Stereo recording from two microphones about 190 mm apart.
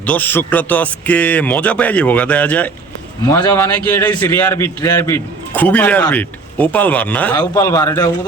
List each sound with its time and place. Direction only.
0.0 s a man's voice: 10° left (ahead or behind)